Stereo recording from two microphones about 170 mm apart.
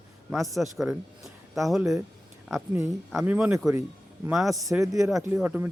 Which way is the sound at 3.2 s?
10° right (ahead or behind).